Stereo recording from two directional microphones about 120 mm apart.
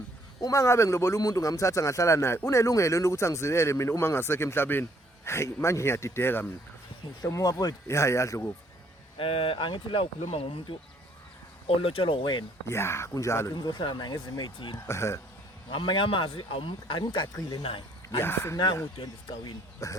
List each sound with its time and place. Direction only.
0.4 s a man's voice: 25° left (ahead or behind)
7.2 s a man's voice: 30° left (ahead or behind)
9.1 s speech: 50° left (ahead or behind)
10.2 s speech: 55° left (ahead or behind); by 12.5 s 40° left (ahead or behind)
12.6 s a man's voice: 20° left (ahead or behind)
13.6 s speech: 40° left (ahead or behind)
14.8 s a man's voice: 20° left (ahead or behind)
15.7 s speech: 45° left (ahead or behind)
18.2 s a man's voice: 20° left (ahead or behind)
18.5 s a man's voice: 35° left (ahead or behind)